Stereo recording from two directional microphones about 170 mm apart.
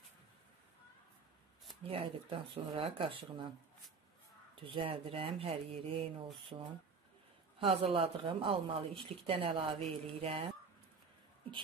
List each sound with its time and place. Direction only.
1.8 s a woman's voice: 35° right (ahead or behind)
4.6 s a woman's voice: 30° right (ahead or behind)